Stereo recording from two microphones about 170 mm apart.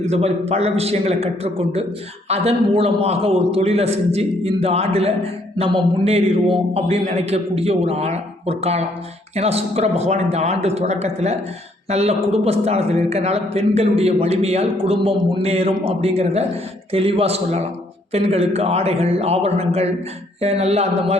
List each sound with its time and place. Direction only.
0.1 s a man's voice: 35° right (ahead or behind)